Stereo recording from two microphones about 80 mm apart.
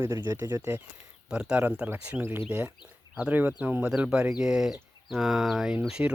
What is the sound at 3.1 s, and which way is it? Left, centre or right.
Speech, centre.